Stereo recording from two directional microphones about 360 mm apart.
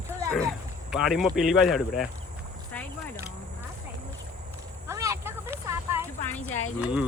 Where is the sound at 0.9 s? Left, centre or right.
Centre.